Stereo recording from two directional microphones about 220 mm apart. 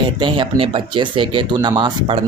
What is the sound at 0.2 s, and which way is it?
Speech, 20° right (ahead or behind).